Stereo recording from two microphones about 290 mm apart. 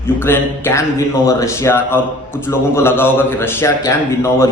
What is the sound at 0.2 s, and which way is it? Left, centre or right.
A man's voice, centre.